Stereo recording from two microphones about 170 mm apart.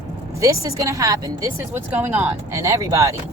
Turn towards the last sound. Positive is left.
turn(degrees=-20)  # may be behind; listen again after turning